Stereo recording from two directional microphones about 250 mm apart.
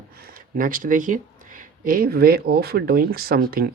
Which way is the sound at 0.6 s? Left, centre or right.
Right.